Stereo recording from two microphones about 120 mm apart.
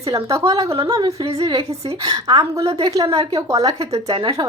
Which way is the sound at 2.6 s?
60° right (ahead or behind).